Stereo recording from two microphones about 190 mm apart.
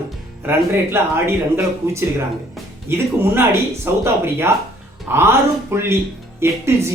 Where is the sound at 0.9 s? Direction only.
10° right (ahead or behind).